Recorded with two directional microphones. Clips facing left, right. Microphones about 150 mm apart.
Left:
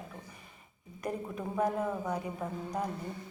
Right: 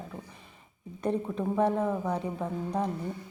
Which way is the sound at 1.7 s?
5° left (ahead or behind).